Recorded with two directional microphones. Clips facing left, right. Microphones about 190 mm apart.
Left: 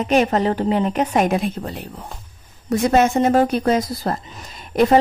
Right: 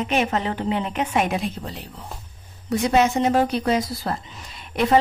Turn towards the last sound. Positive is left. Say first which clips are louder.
# left 6 dB
turn(degrees=40)  # may be behind; listen again after turning